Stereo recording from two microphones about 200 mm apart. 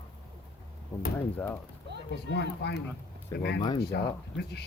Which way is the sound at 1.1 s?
10° left (ahead or behind).